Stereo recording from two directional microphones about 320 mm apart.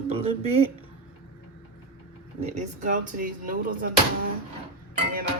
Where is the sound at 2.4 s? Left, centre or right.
Right.